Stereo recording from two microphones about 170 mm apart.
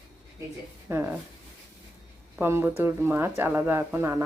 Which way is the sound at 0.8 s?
15° right (ahead or behind).